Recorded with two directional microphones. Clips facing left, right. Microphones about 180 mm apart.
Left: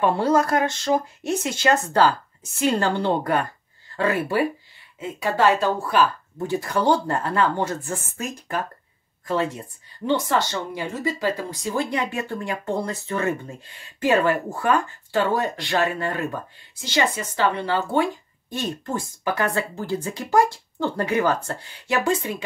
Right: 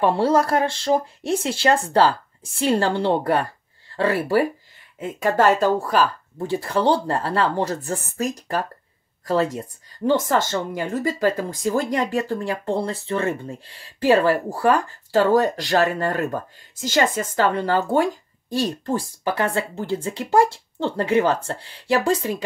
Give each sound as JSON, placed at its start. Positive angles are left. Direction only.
{"t": 0.0, "sound": "speech", "side_deg": -30}
{"t": 4.9, "sound": "speech", "side_deg": -50}